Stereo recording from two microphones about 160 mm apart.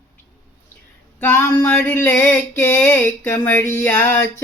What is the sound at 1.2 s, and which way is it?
Female singing, 15° left (ahead or behind).